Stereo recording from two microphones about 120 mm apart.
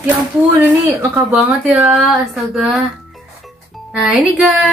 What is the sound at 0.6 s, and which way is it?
Speech, 15° right (ahead or behind).